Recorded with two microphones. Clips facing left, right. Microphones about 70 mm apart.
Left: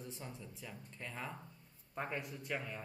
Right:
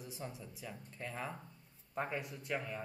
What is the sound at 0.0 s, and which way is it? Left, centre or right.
A man's voice, centre.